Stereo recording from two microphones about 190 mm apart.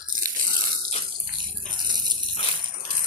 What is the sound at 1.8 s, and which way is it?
Rattle, 20° right (ahead or behind).